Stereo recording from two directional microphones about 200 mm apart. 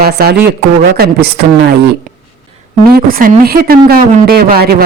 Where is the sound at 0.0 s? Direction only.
50° right (ahead or behind).